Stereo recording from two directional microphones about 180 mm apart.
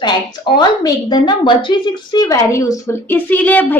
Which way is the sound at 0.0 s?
25° left (ahead or behind).